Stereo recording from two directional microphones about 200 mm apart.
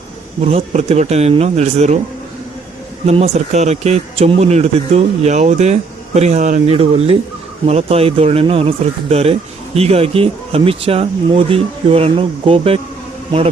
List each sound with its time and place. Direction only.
0.4 s speech: 35° right (ahead or behind)
3.1 s speech: 30° right (ahead or behind)